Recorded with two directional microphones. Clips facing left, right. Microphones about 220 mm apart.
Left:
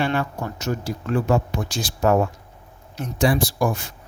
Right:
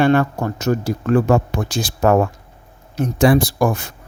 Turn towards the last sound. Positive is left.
turn(degrees=-55)  # may be behind; listen again after turning